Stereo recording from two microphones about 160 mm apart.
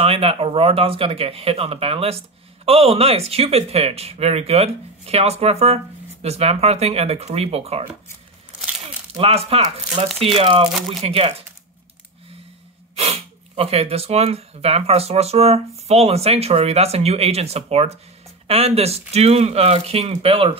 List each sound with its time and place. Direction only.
0.0 s speech: 35° right (ahead or behind)
9.1 s speech: 40° right (ahead or behind)
12.9 s speech: 40° right (ahead or behind)